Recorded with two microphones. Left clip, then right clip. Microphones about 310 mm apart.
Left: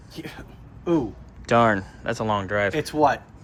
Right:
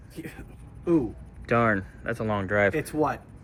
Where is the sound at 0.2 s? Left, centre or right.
Centre.